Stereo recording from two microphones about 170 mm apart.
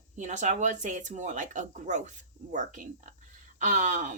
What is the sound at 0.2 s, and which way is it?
Speech, 45° right (ahead or behind).